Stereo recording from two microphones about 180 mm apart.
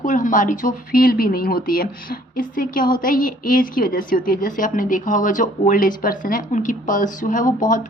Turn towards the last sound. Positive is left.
turn(degrees=45)  # may be behind; listen again after turning